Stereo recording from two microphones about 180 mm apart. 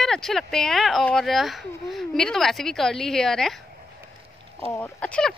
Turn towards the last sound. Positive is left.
turn(degrees=15)  # may be behind; listen again after turning